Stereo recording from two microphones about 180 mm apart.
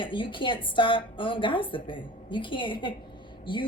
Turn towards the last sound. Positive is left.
turn(degrees=25)  # may be behind; listen again after turning